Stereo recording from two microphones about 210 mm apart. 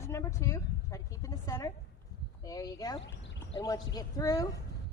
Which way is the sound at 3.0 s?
60° left (ahead or behind).